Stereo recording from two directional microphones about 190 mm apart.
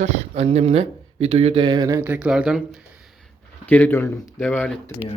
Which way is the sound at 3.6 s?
10° left (ahead or behind).